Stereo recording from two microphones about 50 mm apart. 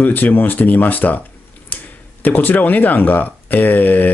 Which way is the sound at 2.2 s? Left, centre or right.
Left.